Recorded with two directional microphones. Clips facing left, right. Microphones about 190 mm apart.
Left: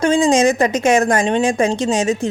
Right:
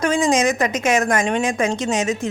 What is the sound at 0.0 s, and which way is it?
Speech, 30° left (ahead or behind).